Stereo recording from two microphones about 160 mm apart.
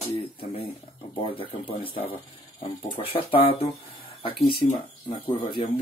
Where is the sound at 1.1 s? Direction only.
35° left (ahead or behind).